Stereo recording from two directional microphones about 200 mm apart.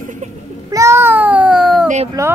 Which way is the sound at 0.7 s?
15° right (ahead or behind).